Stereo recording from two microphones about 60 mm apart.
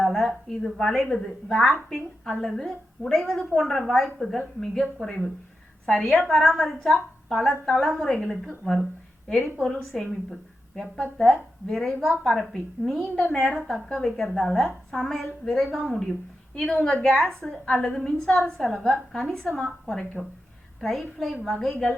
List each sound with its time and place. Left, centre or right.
0.0 s a sound: centre
0.4 s a woman's voice: centre
20.2 s speech: centre
20.8 s a woman's voice: centre